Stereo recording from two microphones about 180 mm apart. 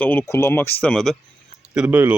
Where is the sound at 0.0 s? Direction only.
10° left (ahead or behind).